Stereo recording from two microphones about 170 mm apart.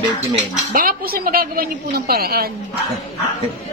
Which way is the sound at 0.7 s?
60° right (ahead or behind).